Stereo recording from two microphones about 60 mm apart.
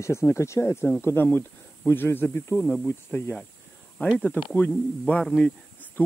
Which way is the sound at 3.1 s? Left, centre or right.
Left.